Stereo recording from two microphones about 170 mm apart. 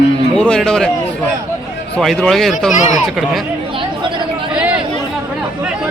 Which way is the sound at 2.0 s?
Centre (ahead or behind).